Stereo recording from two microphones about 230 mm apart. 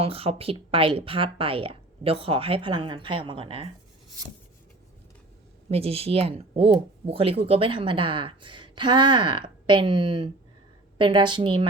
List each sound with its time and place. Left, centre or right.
0.0 s speech: right
5.7 s speech: right